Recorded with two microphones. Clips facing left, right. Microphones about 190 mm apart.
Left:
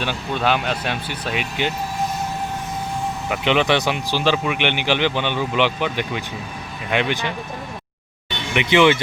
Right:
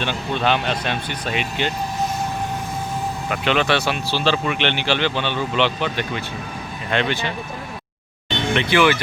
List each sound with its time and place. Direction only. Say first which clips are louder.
0.0 s speech: even; 10° left (ahead or behind)
3.2 s speech: left 2 dB; 15° left (ahead or behind)
8.5 s speech: left 3 dB; 20° left (ahead or behind)